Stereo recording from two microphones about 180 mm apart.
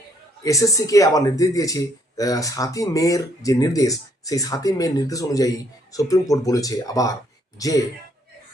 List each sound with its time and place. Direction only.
0.4 s speech: 20° left (ahead or behind)